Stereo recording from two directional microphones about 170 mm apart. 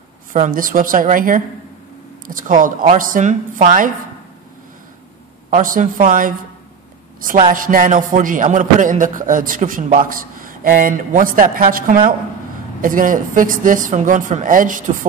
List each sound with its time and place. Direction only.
0.3 s speech: 55° right (ahead or behind)
5.5 s a woman's voice: 50° right (ahead or behind)